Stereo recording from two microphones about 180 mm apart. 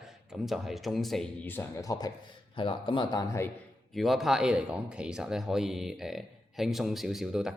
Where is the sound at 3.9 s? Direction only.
Centre (ahead or behind).